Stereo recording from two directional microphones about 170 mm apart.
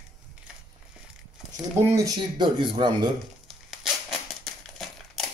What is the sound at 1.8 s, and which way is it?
A man's voice, 20° right (ahead or behind).